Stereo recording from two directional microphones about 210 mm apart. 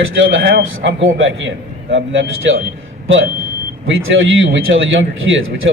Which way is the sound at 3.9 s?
65° right (ahead or behind).